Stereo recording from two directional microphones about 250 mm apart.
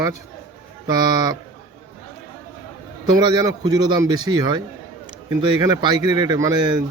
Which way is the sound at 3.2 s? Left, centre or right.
Centre.